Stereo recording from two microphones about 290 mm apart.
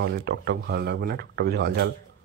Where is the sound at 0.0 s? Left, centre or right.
Right.